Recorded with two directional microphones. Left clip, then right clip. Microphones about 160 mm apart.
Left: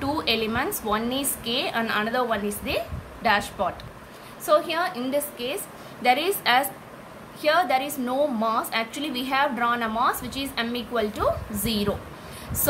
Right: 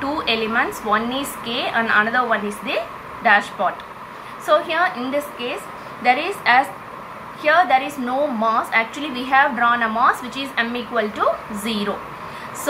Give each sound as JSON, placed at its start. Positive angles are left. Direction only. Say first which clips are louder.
{"t": 0.0, "sound": "a woman's voice", "louder": "right 4 dB", "side_deg": 65}
{"t": 6.0, "sound": "a woman's voice", "louder": "right 4 dB", "side_deg": 90}
{"t": 7.4, "sound": "a woman's voice", "louder": "right 6 dB", "side_deg": 60}